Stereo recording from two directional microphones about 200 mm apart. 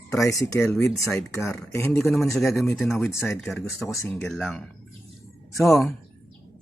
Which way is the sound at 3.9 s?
15° left (ahead or behind).